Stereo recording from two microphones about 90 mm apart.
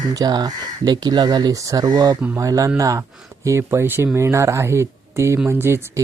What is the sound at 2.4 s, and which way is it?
Speech, 40° right (ahead or behind).